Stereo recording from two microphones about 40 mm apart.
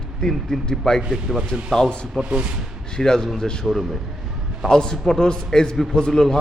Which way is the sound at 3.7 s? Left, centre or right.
Centre.